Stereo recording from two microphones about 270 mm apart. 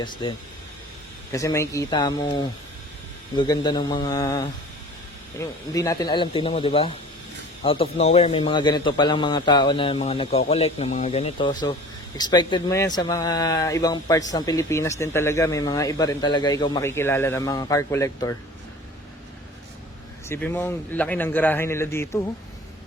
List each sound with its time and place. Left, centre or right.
0.0 s a man's voice: centre
20.2 s speech: centre